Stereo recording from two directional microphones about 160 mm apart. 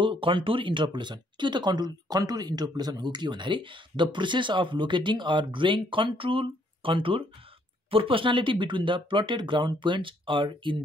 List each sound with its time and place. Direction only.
0.0 s speech: 30° right (ahead or behind)